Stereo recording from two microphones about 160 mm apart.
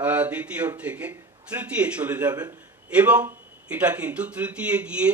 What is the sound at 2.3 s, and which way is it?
Speech, 25° right (ahead or behind).